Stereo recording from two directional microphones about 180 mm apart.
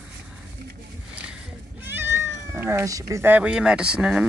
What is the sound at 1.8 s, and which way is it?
Cat, 10° right (ahead or behind).